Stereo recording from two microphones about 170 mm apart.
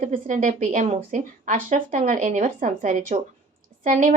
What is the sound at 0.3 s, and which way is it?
A woman's voice, 50° right (ahead or behind).